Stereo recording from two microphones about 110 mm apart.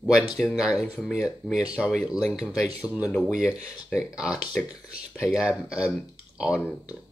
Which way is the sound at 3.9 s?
10° right (ahead or behind).